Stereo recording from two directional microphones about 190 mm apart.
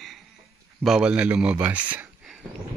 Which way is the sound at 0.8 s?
5° right (ahead or behind).